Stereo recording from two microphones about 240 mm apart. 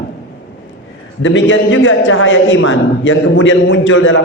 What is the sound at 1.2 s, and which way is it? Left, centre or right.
A woman's voice, left.